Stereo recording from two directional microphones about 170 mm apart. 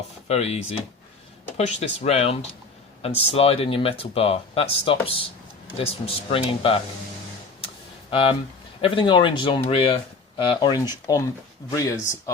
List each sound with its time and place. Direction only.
0.3 s speech: 40° left (ahead or behind)
8.1 s speech: 30° left (ahead or behind)